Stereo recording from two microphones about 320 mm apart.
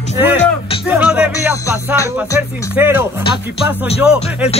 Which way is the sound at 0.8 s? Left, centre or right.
Centre.